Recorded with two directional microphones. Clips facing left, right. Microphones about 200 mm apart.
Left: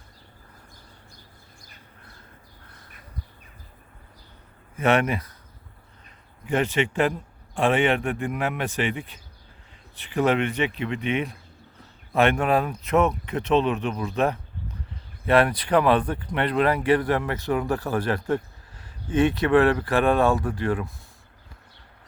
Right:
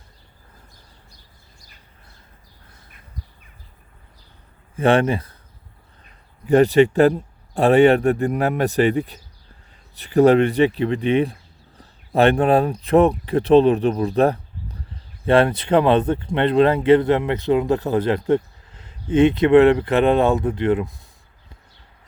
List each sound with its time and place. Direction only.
4.8 s speech: 30° right (ahead or behind)
6.4 s speech: 40° right (ahead or behind); by 20.9 s 20° right (ahead or behind)